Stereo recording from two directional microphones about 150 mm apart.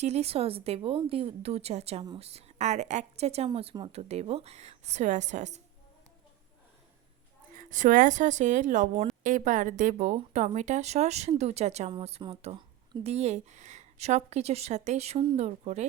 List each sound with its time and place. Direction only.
0.0 s a woman's voice: 45° right (ahead or behind)
7.5 s a woman's voice: 60° right (ahead or behind)